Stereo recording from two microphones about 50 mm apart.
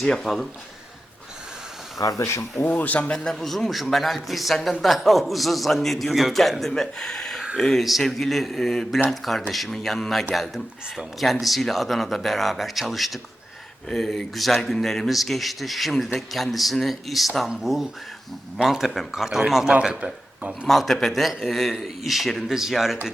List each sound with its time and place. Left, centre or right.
0.0 s speech: centre
2.1 s speech: left
2.6 s speech: left
3.1 s speech: centre
3.5 s speech: centre
20.7 s speech: centre